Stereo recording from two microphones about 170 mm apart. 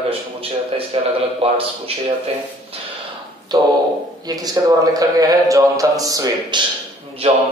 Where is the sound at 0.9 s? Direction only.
35° right (ahead or behind).